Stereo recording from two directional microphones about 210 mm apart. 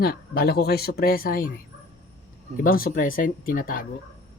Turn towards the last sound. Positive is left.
turn(degrees=40)  # may be behind; listen again after turning